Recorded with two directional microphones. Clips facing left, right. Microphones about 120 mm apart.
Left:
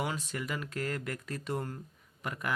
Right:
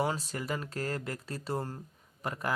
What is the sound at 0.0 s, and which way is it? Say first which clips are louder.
Speech: right 3 dB; 35° right (ahead or behind).